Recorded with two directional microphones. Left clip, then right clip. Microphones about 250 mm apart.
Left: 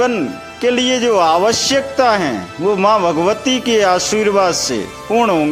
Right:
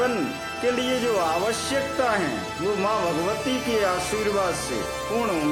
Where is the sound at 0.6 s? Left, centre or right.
Left.